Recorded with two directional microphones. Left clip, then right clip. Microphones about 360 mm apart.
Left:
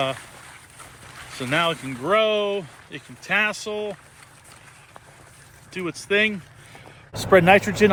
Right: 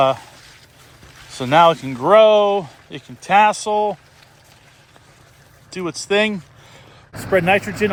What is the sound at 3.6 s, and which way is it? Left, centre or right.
Speech, right.